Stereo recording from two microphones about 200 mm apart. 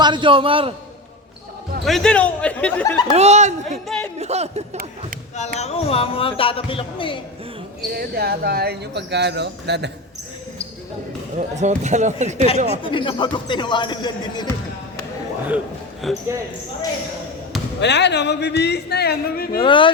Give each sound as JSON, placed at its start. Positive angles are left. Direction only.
{"t": 0.0, "sound": "a man's voice", "side_deg": -25}
{"t": 1.8, "sound": "speech", "side_deg": 0}
{"t": 3.2, "sound": "speech", "side_deg": -35}
{"t": 3.8, "sound": "a sound", "side_deg": 5}
{"t": 4.2, "sound": "speech", "side_deg": -35}
{"t": 5.5, "sound": "speech", "side_deg": 30}
{"t": 7.9, "sound": "speech", "side_deg": -50}
{"t": 11.3, "sound": "speech", "side_deg": -35}
{"t": 12.8, "sound": "speech", "side_deg": 25}
{"t": 16.0, "sound": "speech", "side_deg": 0}
{"t": 17.7, "sound": "speech", "side_deg": 60}
{"t": 19.5, "sound": "speech", "side_deg": 25}